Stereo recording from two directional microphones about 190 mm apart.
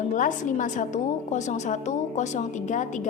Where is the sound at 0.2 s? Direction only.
40° left (ahead or behind).